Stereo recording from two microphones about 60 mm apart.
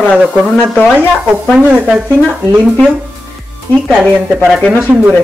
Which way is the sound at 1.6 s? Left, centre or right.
Right.